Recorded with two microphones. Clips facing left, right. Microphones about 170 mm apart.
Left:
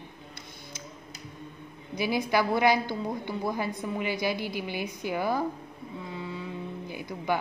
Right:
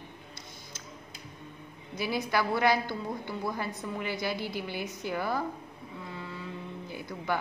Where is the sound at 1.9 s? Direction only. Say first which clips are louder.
Left 3 dB; 15° left (ahead or behind).